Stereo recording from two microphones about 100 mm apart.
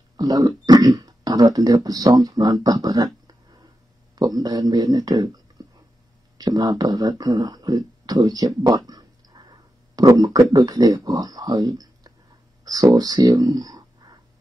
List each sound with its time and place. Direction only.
0.2 s speech: 40° right (ahead or behind)